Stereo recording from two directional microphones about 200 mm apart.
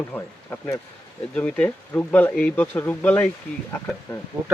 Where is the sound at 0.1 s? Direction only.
10° left (ahead or behind).